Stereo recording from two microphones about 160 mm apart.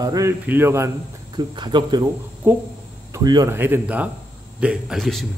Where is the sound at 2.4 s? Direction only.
10° right (ahead or behind).